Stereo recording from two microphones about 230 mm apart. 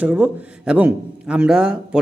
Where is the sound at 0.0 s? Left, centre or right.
Centre.